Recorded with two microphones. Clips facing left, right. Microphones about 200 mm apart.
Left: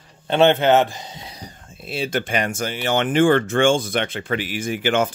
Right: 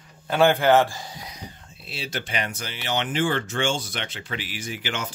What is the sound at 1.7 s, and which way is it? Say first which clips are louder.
Speech: left 10 dB; 50° left (ahead or behind).